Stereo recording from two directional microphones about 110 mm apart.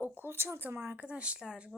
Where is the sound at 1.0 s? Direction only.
10° right (ahead or behind).